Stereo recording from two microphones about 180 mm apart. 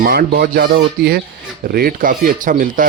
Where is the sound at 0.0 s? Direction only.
60° right (ahead or behind).